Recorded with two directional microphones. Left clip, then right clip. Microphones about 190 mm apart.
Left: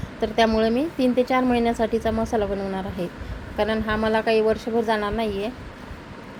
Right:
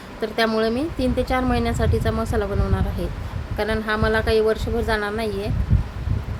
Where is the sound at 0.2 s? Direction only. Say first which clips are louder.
Left 1 dB; 5° right (ahead or behind).